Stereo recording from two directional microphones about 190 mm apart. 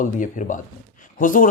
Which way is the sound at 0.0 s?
40° left (ahead or behind).